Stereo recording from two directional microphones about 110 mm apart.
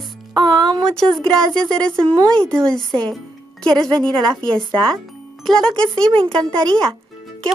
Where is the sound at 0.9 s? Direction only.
5° left (ahead or behind).